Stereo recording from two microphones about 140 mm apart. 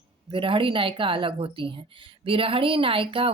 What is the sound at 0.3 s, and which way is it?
A woman's voice, 40° right (ahead or behind).